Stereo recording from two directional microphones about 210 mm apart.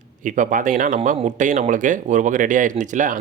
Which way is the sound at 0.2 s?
35° right (ahead or behind).